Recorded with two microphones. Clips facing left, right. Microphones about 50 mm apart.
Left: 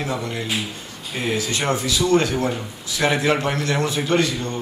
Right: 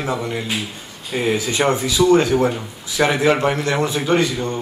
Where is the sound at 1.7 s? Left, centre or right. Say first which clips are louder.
Right 4 dB; centre.